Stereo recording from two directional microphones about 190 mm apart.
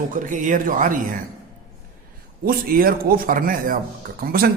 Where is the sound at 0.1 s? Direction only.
45° right (ahead or behind).